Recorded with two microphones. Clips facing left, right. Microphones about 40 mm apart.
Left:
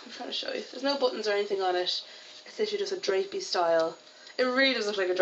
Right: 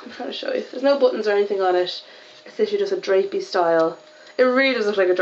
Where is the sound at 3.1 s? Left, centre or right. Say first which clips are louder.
Right 9 dB; right.